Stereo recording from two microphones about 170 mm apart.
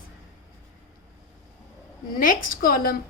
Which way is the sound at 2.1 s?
55° left (ahead or behind).